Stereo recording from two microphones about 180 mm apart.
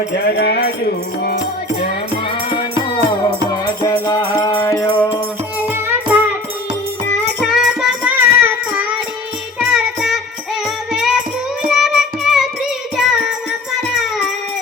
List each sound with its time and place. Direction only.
0.3 s music: 65° left (ahead or behind)
3.5 s music: 20° left (ahead or behind)
4.8 s music: 10° left (ahead or behind)
5.5 s music: 10° right (ahead or behind)
7.4 s music: centre (ahead or behind)